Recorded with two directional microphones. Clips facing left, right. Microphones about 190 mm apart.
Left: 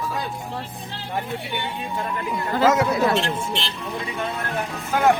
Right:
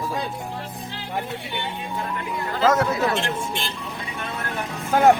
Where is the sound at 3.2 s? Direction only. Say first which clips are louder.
Left 1 dB; 50° right (ahead or behind).